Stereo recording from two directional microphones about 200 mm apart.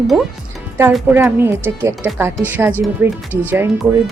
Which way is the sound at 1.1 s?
10° right (ahead or behind).